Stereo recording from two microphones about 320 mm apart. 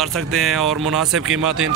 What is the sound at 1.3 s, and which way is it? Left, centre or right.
Speech, right.